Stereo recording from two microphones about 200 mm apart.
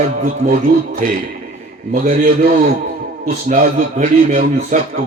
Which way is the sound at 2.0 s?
45° right (ahead or behind).